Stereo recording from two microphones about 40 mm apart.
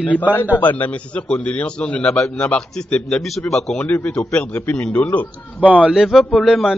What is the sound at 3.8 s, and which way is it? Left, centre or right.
A man's voice, left.